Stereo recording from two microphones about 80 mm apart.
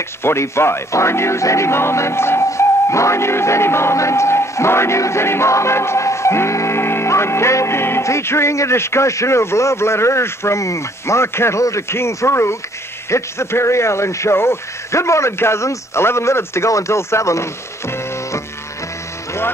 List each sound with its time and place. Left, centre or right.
0.2 s speech: left